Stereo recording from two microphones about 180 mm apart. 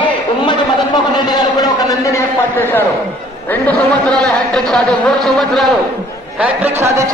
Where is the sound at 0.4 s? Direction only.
25° left (ahead or behind); by 5.8 s centre (ahead or behind).